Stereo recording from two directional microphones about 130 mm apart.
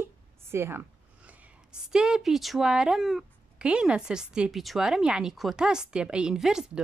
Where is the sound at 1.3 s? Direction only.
10° right (ahead or behind).